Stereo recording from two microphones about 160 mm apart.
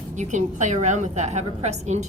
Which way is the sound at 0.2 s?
50° right (ahead or behind).